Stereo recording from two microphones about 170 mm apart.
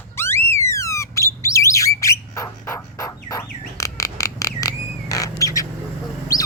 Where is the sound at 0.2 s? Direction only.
15° left (ahead or behind).